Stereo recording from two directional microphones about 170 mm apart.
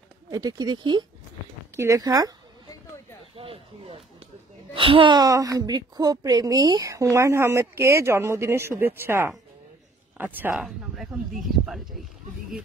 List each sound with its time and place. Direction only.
0.3 s speech: 20° right (ahead or behind)
3.3 s a woman's voice: 35° right (ahead or behind); by 12.0 s centre (ahead or behind)